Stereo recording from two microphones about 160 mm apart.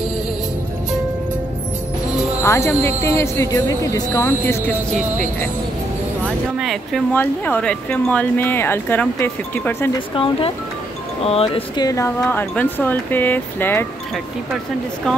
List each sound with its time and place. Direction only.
2.4 s speech: 15° left (ahead or behind)
6.2 s speech: centre (ahead or behind)
7.2 s speech: 10° left (ahead or behind)
10.1 s speech: 30° left (ahead or behind); by 13.8 s 10° left (ahead or behind)